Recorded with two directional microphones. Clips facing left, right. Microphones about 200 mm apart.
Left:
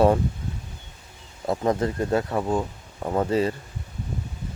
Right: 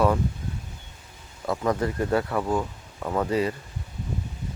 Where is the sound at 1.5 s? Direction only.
25° left (ahead or behind).